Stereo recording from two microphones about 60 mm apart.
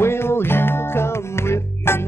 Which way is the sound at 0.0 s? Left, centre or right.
Left.